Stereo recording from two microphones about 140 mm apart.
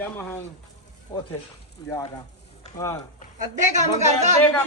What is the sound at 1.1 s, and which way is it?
Speech, 30° left (ahead or behind).